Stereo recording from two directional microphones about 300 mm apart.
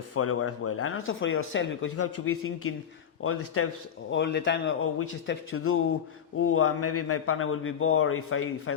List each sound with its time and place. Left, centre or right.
0.1 s speech: left
4.1 s a man's voice: left